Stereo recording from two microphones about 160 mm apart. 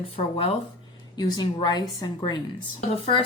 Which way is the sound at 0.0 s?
35° left (ahead or behind).